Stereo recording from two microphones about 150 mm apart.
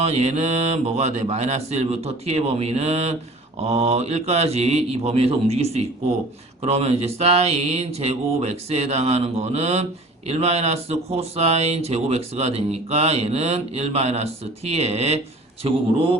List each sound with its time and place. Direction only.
0.0 s speech: 45° right (ahead or behind)